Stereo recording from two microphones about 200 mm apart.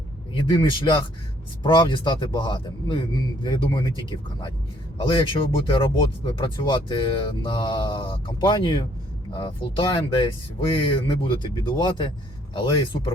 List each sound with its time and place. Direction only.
0.3 s speech: 25° left (ahead or behind)